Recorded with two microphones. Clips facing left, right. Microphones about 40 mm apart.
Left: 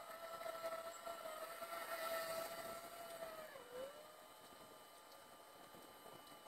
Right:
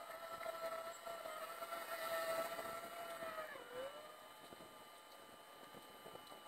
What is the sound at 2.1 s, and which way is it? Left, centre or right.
Vehicle, right.